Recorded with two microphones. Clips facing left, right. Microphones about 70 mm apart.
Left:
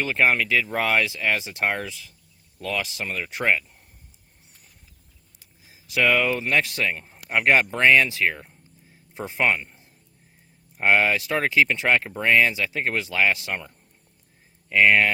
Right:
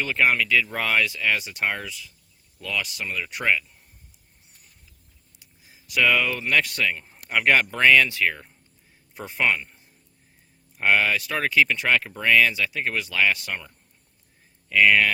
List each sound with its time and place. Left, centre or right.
0.0 s speech: centre
5.6 s a man's voice: left